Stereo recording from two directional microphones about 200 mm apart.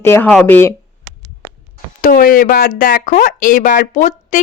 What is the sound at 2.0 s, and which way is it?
Speech, 45° left (ahead or behind).